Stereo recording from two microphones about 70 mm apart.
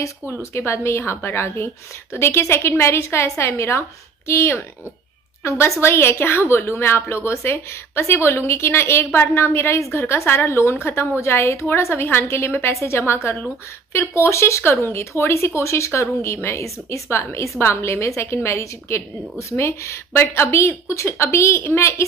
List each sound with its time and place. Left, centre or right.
0.4 s a woman's voice: left